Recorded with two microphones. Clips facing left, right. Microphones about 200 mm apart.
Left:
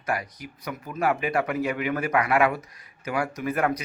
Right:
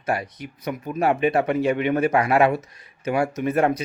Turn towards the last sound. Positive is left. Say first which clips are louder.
# right 5 dB
turn(degrees=-25)  # may be behind; listen again after turning